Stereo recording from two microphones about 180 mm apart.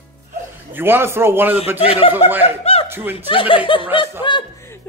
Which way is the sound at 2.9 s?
10° right (ahead or behind).